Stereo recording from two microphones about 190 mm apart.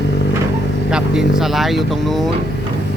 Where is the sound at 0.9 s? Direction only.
5° right (ahead or behind).